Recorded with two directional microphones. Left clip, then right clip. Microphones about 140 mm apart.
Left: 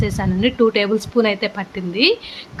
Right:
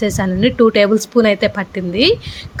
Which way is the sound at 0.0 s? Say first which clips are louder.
Right 4 dB; 35° right (ahead or behind).